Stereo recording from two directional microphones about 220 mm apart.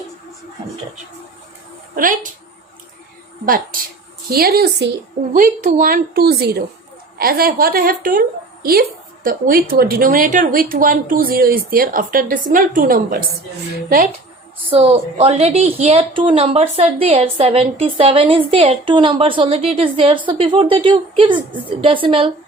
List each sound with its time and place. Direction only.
2.0 s a woman's voice: 40° right (ahead or behind)
3.4 s a woman's voice: 40° right (ahead or behind)
14.7 s a woman's voice: 25° right (ahead or behind)